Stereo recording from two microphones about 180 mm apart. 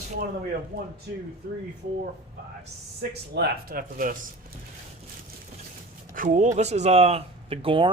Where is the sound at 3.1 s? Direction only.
65° right (ahead or behind).